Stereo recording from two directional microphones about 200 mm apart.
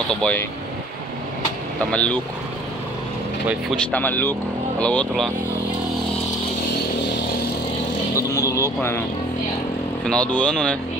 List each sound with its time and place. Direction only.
0.1 s speech: 5° left (ahead or behind)
1.9 s speech: 5° left (ahead or behind)
3.7 s speech: 5° left (ahead or behind)
8.2 s speech: 15° left (ahead or behind)
10.0 s speech: 5° left (ahead or behind)